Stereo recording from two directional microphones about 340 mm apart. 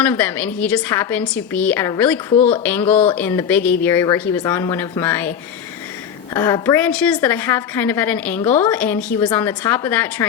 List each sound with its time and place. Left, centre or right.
0.0 s a woman's voice: centre
6.3 s a woman's voice: centre